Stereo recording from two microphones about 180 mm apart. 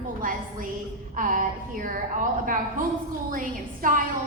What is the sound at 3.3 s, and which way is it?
Music, 50° right (ahead or behind).